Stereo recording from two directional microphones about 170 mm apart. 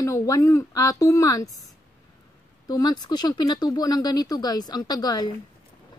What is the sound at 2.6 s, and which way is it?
Speech, 25° left (ahead or behind).